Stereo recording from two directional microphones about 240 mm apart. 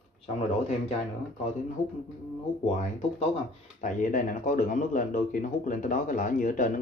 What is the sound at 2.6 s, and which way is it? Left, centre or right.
Speech, left.